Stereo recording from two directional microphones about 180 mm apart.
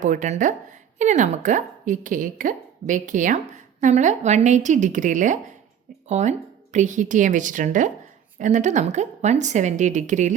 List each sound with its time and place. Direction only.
0.0 s a woman's voice: 45° right (ahead or behind)